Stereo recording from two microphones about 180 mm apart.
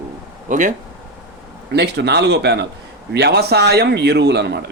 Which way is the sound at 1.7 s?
65° right (ahead or behind).